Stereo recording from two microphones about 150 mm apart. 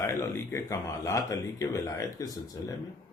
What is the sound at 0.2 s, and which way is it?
Speech, 15° left (ahead or behind).